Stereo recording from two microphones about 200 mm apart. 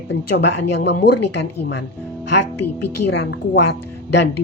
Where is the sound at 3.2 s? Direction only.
60° left (ahead or behind).